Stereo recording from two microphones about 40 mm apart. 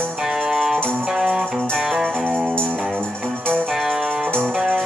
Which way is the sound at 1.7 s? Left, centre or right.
Centre.